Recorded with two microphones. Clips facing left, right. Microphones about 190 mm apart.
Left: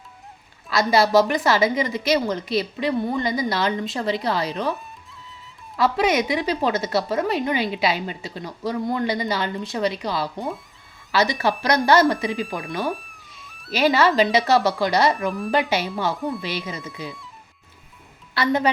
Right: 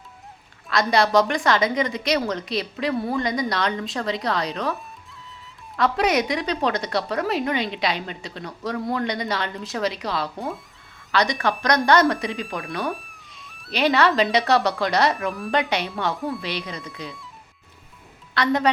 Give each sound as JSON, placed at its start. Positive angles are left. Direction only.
{"t": 0.7, "sound": "speech", "side_deg": 5}
{"t": 18.3, "sound": "speech", "side_deg": 5}